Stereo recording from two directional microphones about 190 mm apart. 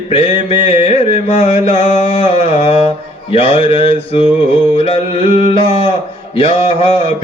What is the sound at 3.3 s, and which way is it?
Speech, 30° left (ahead or behind).